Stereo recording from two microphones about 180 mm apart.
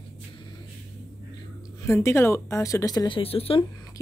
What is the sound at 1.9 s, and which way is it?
Speech, 15° left (ahead or behind).